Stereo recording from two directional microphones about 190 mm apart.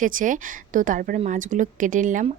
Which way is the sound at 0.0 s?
45° right (ahead or behind).